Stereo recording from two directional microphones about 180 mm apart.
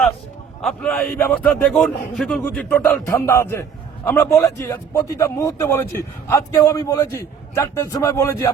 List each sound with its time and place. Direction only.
0.6 s a man's voice: 5° left (ahead or behind)